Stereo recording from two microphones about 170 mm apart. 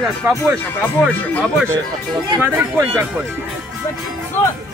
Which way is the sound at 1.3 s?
5° left (ahead or behind).